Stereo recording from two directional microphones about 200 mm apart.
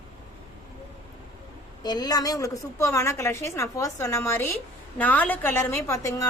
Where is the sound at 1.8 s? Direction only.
20° left (ahead or behind).